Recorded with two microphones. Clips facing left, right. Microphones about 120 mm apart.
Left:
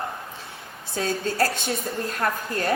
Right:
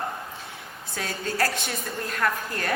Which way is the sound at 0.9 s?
30° left (ahead or behind).